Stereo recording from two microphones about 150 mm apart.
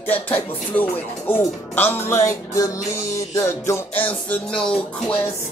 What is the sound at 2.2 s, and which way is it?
Speech, 20° left (ahead or behind).